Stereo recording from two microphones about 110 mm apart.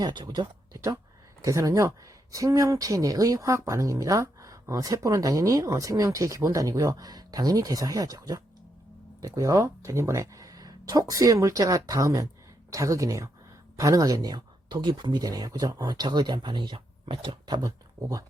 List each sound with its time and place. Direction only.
0.0 s speech: 40° right (ahead or behind)
17.6 s speech: 30° right (ahead or behind)